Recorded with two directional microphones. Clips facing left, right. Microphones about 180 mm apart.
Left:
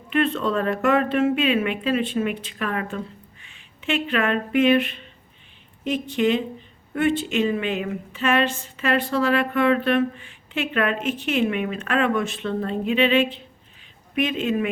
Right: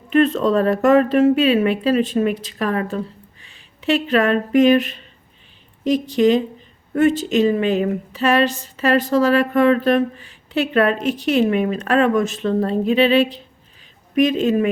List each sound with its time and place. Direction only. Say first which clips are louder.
0.1 s speech: right 6 dB; 40° right (ahead or behind)